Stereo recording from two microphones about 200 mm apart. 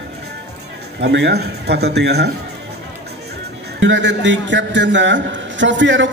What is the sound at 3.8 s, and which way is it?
A man's voice, 65° right (ahead or behind).